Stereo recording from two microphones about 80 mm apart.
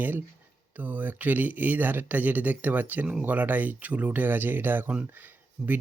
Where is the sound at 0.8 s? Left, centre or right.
Right.